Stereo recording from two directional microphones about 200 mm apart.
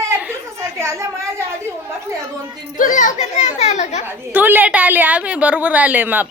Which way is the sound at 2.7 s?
40° left (ahead or behind).